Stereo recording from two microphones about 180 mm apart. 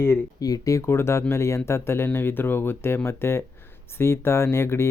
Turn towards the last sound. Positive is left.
turn(degrees=15)  # may be behind; listen again after turning